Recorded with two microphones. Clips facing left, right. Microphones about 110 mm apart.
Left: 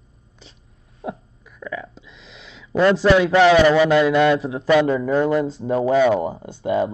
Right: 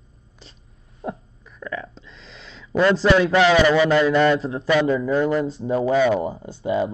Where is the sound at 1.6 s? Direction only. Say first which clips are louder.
Even; 5° left (ahead or behind).